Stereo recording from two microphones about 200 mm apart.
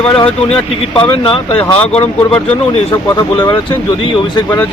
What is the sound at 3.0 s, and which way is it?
Speech, 15° left (ahead or behind).